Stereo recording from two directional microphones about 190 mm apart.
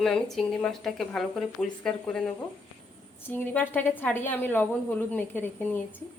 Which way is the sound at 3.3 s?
10° left (ahead or behind).